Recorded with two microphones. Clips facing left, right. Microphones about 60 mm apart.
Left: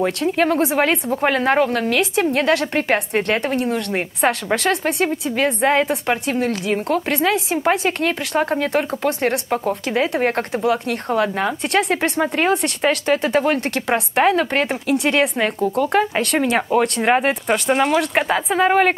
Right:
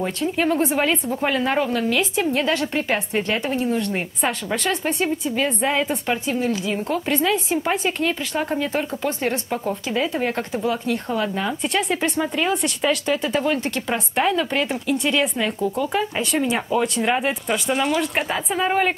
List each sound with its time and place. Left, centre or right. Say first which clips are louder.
0.0 s speech: left 4 dB; left
15.0 s speech: left 5 dB; left